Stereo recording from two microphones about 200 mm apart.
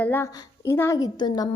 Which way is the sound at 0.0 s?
10° left (ahead or behind).